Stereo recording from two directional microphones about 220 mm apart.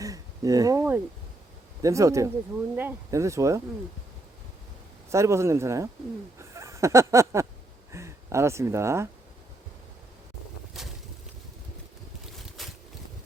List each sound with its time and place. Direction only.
0.0 s speech: 15° right (ahead or behind)
5.1 s speech: 15° right (ahead or behind)
6.4 s a sound: 15° right (ahead or behind)
7.9 s speech: 15° right (ahead or behind)
12.6 s boat: centre (ahead or behind)